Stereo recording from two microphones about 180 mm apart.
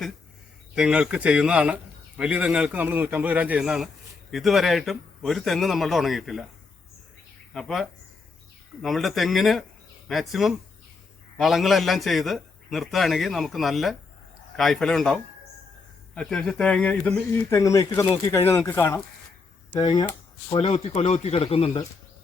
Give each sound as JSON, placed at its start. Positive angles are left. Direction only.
{"t": 0.8, "sound": "a man's voice", "side_deg": -5}
{"t": 7.5, "sound": "a man's voice", "side_deg": 0}
{"t": 17.6, "sound": "speech", "side_deg": 15}